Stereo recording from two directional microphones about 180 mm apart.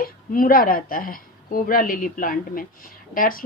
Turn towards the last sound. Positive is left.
turn(degrees=50)  # may be behind; listen again after turning